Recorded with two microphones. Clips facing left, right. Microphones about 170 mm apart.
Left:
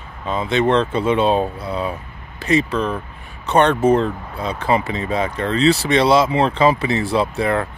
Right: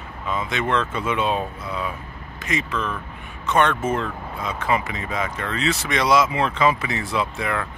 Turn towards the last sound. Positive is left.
turn(degrees=35)  # may be behind; listen again after turning